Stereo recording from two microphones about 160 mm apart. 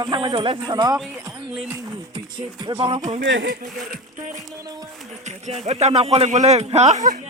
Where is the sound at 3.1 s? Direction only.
70° right (ahead or behind).